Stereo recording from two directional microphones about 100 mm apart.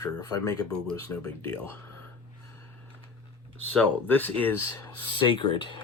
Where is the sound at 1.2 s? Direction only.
15° left (ahead or behind).